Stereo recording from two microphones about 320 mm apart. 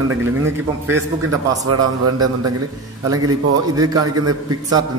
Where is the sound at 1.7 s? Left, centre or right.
Right.